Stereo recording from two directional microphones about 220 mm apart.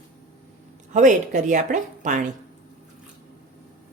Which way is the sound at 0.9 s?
35° right (ahead or behind).